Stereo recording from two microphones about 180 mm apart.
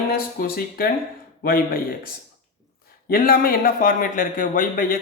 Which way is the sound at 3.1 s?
55° left (ahead or behind).